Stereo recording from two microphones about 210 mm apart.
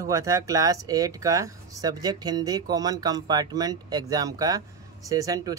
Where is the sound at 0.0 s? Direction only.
15° right (ahead or behind).